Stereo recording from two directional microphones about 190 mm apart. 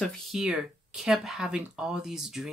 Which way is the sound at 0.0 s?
Centre (ahead or behind).